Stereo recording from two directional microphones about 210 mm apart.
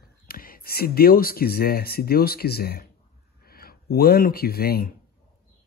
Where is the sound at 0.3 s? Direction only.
45° left (ahead or behind).